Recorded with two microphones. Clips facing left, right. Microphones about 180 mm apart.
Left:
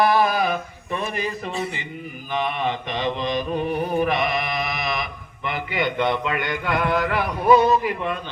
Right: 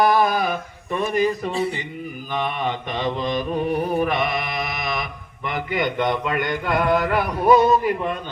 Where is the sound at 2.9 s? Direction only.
45° right (ahead or behind).